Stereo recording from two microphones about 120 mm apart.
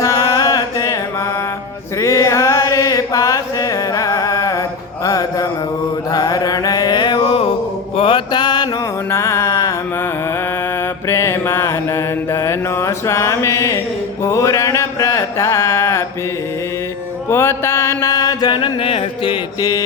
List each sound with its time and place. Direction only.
0.0 s music: 30° left (ahead or behind)
2.0 s chant: 25° left (ahead or behind)
5.0 s music: 30° left (ahead or behind)
6.1 s mantra: 30° left (ahead or behind)
9.0 s a sound: 25° left (ahead or behind)
11.1 s mantra: 25° left (ahead or behind)
14.3 s a sound: 25° left (ahead or behind)
17.2 s mantra: 20° left (ahead or behind); by 19.4 s 50° left (ahead or behind)